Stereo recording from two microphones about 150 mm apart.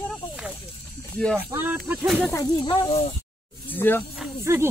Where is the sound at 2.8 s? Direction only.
40° left (ahead or behind).